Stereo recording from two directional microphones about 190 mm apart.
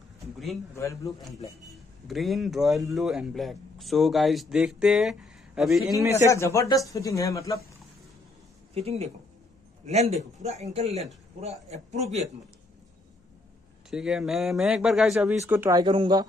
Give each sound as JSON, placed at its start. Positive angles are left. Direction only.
{"t": 0.2, "sound": "a sound", "side_deg": 0}
{"t": 0.7, "sound": "speech", "side_deg": 15}
{"t": 2.0, "sound": "speech", "side_deg": 0}
{"t": 5.9, "sound": "speech", "side_deg": -15}
{"t": 6.2, "sound": "speech", "side_deg": 15}
{"t": 8.7, "sound": "a man's voice", "side_deg": -35}
{"t": 13.8, "sound": "speech", "side_deg": -5}
{"t": 15.8, "sound": "speech", "side_deg": -25}